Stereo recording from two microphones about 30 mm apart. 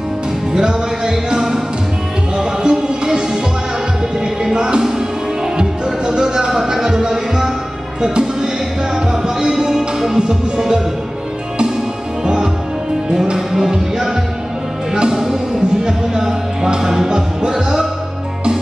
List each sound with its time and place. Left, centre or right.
0.5 s music: right
5.9 s music: right
9.5 s music: centre
10.1 s music: right
13.7 s music: centre
15.8 s music: centre